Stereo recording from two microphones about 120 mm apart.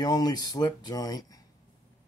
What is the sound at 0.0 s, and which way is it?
Speech, 35° left (ahead or behind).